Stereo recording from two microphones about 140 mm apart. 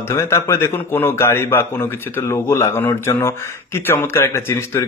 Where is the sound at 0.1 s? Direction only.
20° left (ahead or behind).